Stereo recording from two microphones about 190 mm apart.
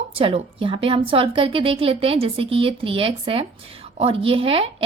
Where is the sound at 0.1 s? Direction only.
30° right (ahead or behind).